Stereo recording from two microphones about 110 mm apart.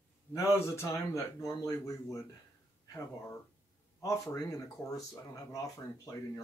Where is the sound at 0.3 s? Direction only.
30° left (ahead or behind).